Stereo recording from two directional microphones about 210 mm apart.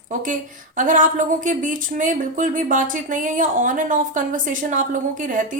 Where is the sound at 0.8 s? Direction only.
40° right (ahead or behind).